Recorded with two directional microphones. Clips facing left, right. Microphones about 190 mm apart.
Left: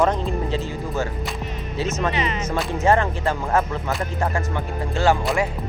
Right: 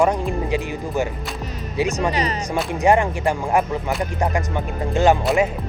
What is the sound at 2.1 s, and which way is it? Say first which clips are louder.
Speech: right 2 dB; 40° right (ahead or behind).